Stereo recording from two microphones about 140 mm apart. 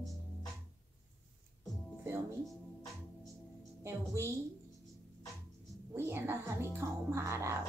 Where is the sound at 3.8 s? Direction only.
20° right (ahead or behind).